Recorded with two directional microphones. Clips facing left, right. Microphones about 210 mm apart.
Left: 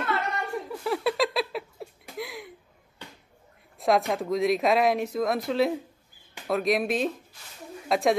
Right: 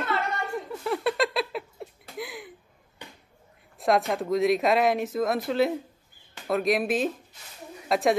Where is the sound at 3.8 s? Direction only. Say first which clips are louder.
Even; centre (ahead or behind).